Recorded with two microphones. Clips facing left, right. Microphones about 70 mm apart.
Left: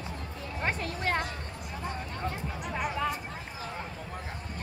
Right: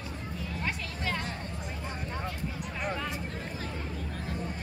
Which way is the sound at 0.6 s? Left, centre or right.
Left.